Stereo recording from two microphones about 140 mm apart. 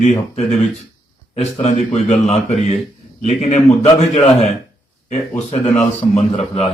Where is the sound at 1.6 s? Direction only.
55° left (ahead or behind).